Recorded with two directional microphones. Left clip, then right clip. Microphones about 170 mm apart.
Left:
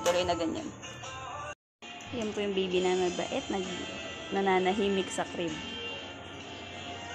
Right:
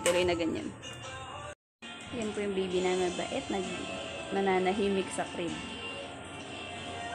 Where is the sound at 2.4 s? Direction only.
5° left (ahead or behind).